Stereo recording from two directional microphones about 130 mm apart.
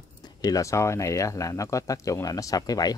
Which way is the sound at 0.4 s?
25° left (ahead or behind).